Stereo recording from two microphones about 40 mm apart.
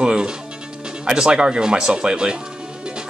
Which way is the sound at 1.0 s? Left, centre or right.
Centre.